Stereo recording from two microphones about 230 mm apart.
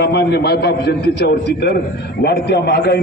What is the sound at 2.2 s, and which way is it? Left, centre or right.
Speech, left.